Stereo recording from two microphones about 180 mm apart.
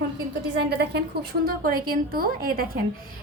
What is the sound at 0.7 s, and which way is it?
A woman's voice, 65° right (ahead or behind).